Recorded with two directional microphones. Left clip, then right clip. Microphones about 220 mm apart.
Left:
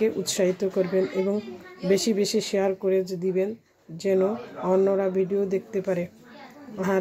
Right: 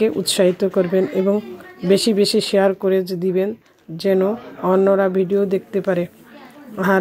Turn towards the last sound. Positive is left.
turn(degrees=-10)  # may be behind; listen again after turning